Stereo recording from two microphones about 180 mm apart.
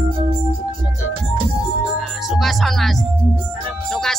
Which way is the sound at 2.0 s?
Centre (ahead or behind).